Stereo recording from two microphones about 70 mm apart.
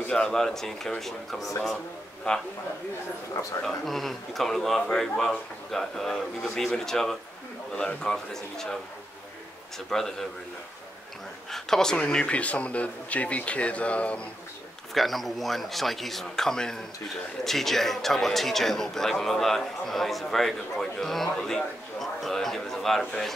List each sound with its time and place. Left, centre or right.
0.1 s speech: centre
3.6 s speech: centre
9.8 s speech: centre
11.5 s speech: centre
15.0 s speech: centre